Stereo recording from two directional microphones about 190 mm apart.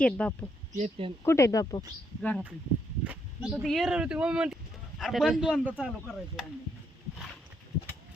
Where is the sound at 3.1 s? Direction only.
5° right (ahead or behind).